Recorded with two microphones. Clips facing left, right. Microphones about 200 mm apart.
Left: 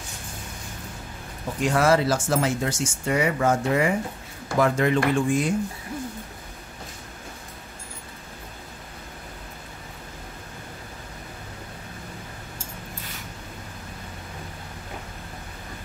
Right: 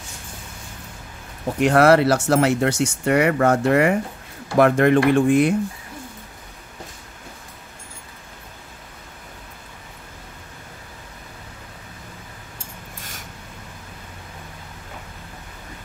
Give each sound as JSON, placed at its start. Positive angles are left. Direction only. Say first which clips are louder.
{"t": 1.6, "sound": "speech", "louder": "right 6 dB", "side_deg": -65}